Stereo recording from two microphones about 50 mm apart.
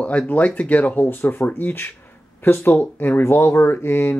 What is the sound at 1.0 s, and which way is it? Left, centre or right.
Speech, left.